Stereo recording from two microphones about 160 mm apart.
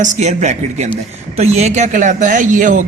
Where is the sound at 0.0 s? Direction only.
45° right (ahead or behind).